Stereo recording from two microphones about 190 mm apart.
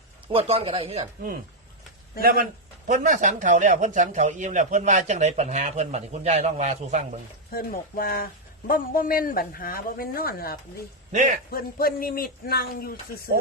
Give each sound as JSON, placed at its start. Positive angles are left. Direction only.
{"t": 0.3, "sound": "speech", "side_deg": -30}
{"t": 2.2, "sound": "speech", "side_deg": -50}
{"t": 7.5, "sound": "speech", "side_deg": 50}
{"t": 11.1, "sound": "a man's voice", "side_deg": -40}
{"t": 11.5, "sound": "speech", "side_deg": 50}